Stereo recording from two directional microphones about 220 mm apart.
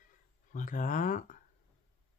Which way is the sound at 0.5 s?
35° left (ahead or behind).